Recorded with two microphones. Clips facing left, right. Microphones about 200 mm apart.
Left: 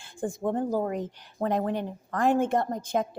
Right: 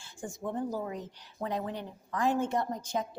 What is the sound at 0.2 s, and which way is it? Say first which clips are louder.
A woman's voice: left 7 dB; 55° left (ahead or behind).